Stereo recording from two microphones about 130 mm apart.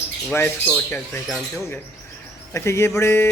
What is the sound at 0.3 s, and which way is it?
Speech, 15° left (ahead or behind).